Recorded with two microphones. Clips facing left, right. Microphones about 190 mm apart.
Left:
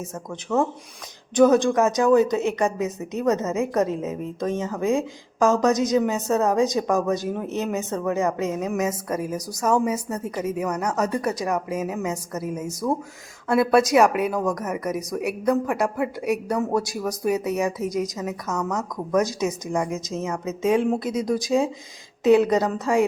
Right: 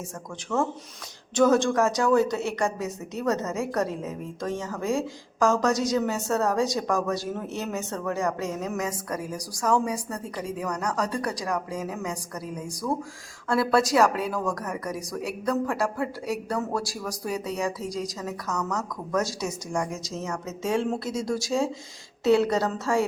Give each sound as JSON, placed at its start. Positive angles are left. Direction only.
{"t": 0.5, "sound": "a woman's voice", "side_deg": 20}